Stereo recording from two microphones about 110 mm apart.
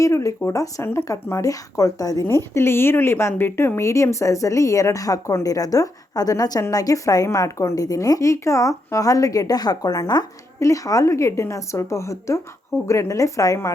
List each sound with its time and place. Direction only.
0.0 s a woman's voice: 30° left (ahead or behind)